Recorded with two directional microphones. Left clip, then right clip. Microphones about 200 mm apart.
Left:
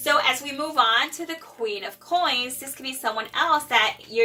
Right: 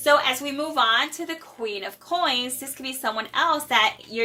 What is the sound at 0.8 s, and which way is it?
A woman's voice, 50° right (ahead or behind).